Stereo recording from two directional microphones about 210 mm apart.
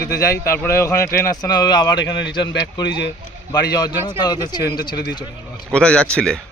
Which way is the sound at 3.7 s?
20° left (ahead or behind).